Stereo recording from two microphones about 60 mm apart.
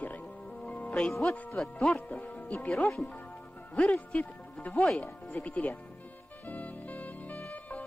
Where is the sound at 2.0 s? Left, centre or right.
Left.